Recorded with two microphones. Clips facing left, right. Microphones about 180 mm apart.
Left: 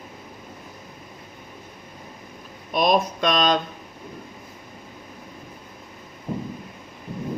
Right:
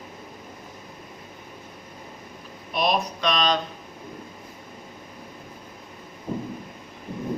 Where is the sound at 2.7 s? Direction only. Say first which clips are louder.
Left 4 dB; 45° left (ahead or behind).